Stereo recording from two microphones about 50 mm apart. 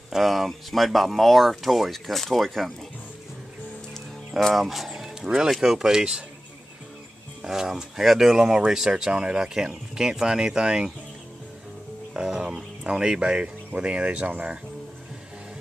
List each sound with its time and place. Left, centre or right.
0.1 s speech: centre
4.6 s speech: centre
7.4 s speech: centre
12.1 s speech: centre